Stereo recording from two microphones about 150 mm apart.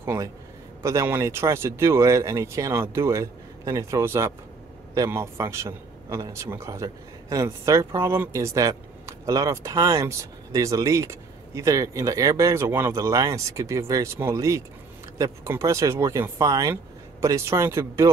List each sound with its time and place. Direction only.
0.0 s a man's voice: 15° right (ahead or behind)